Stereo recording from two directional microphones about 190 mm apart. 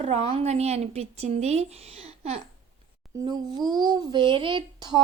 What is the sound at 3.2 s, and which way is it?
A woman's voice, 20° right (ahead or behind).